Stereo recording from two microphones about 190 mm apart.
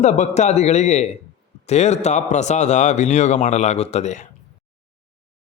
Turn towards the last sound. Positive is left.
turn(degrees=40)  # may be behind; listen again after turning